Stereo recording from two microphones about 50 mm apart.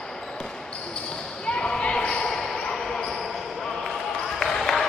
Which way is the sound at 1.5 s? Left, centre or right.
Centre.